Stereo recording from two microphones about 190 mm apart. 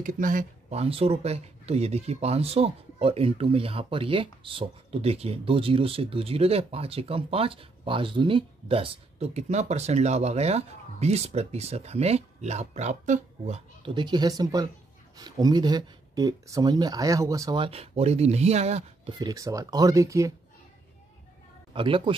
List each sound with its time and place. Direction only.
0.0 s speech: 45° right (ahead or behind)
13.8 s speech: 25° right (ahead or behind)
19.1 s speech: 20° right (ahead or behind)
21.7 s speech: 25° right (ahead or behind)